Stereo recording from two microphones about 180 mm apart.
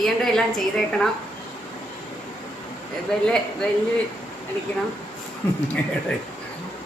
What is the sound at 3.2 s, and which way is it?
Speech, 5° left (ahead or behind).